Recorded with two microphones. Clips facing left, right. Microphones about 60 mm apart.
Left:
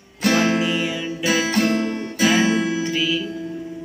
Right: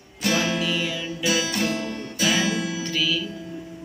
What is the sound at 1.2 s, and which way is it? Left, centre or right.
Guitar, left.